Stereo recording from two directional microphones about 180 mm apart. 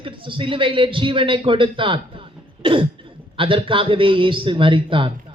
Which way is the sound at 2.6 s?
30° right (ahead or behind).